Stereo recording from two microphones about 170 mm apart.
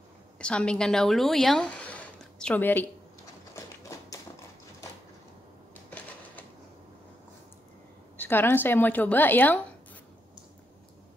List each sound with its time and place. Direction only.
0.4 s speech: 5° left (ahead or behind)
3.5 s tap: 20° left (ahead or behind)
5.9 s a sound: 10° left (ahead or behind)
8.2 s a woman's voice: 10° left (ahead or behind)